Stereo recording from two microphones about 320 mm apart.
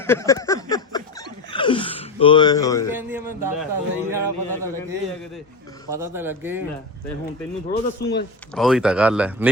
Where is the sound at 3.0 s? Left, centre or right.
Centre.